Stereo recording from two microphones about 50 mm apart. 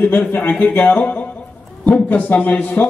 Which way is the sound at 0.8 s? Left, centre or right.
Left.